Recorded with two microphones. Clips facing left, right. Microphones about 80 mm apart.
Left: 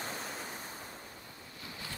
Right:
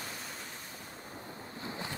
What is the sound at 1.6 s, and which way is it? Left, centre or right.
Boat, right.